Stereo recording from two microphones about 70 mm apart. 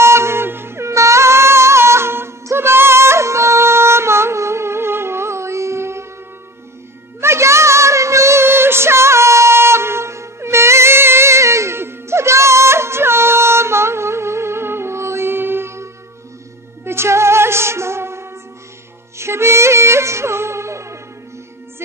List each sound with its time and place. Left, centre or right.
0.0 s music: right
7.2 s music: right